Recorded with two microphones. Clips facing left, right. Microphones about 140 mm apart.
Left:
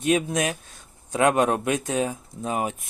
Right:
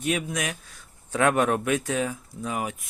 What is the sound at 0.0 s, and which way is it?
Speech, 25° left (ahead or behind).